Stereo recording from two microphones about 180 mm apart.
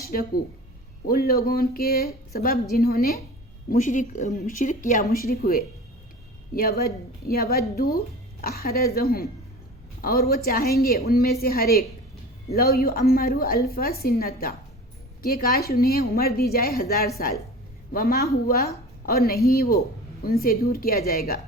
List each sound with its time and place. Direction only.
0.0 s a woman's voice: 55° left (ahead or behind)
3.7 s speech: 45° left (ahead or behind)
5.1 s a woman's voice: 55° left (ahead or behind)